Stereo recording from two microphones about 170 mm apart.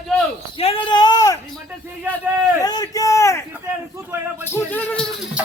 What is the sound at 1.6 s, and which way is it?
Speech, 10° right (ahead or behind).